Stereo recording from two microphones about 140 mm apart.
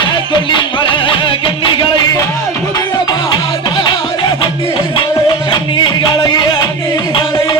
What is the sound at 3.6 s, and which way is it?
Music, 30° left (ahead or behind).